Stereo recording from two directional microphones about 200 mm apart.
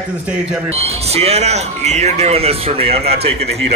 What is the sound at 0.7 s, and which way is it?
Speech, 30° right (ahead or behind).